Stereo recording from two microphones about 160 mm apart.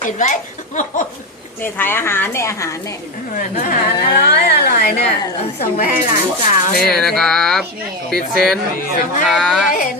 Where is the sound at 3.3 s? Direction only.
60° left (ahead or behind).